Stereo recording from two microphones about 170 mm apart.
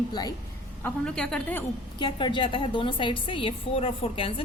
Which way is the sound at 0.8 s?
5° left (ahead or behind).